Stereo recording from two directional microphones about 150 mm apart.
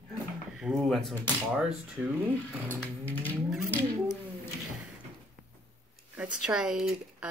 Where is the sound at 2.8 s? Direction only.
10° left (ahead or behind).